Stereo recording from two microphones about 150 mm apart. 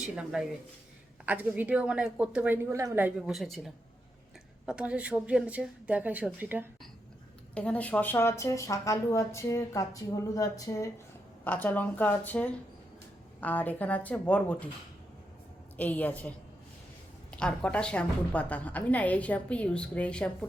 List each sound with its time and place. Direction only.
0.0 s a woman's voice: 5° right (ahead or behind)
3.2 s a woman's voice: centre (ahead or behind)
7.5 s speech: 10° left (ahead or behind)
11.4 s a woman's voice: 10° left (ahead or behind)
15.8 s a woman's voice: 10° left (ahead or behind)
17.3 s a woman's voice: 5° left (ahead or behind)